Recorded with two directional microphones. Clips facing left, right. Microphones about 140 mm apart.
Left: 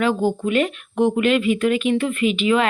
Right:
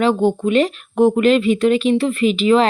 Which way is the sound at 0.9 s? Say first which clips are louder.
Right 4 dB; 40° right (ahead or behind).